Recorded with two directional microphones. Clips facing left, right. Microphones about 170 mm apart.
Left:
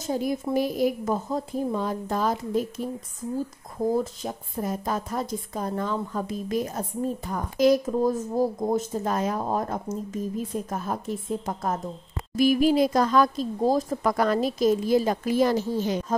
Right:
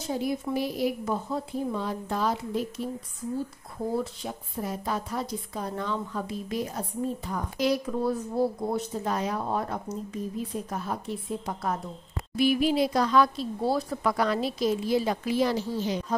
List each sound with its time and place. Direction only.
0.0 s a woman's voice: 45° left (ahead or behind)
3.9 s a woman's voice: 45° left (ahead or behind)